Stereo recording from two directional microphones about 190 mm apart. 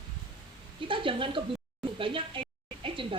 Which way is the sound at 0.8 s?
25° right (ahead or behind).